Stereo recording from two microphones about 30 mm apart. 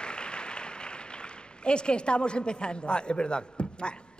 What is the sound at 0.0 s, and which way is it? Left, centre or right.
A man's voice, left.